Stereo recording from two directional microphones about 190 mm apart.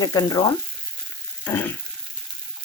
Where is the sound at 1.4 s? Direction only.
10° left (ahead or behind).